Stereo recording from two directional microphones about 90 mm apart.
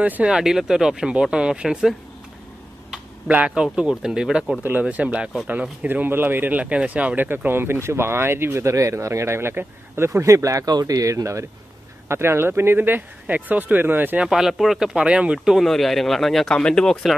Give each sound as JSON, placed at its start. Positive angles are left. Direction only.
{"t": 0.0, "sound": "speech", "side_deg": -15}
{"t": 3.3, "sound": "speech", "side_deg": -15}
{"t": 14.2, "sound": "speech", "side_deg": -5}